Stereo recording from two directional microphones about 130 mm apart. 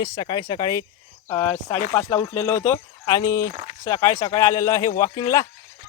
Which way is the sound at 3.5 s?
70° right (ahead or behind).